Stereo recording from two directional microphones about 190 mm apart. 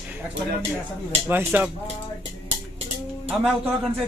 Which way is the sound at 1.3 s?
10° right (ahead or behind).